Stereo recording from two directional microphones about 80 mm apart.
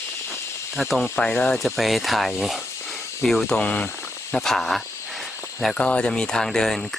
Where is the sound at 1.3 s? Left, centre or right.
Centre.